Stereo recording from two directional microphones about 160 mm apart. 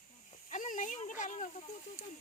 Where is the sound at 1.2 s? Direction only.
50° left (ahead or behind).